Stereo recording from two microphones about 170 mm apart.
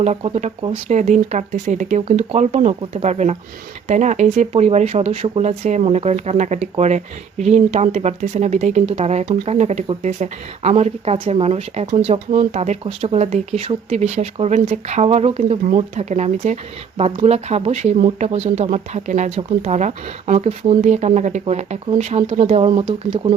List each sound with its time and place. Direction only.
0.0 s speech: 40° right (ahead or behind)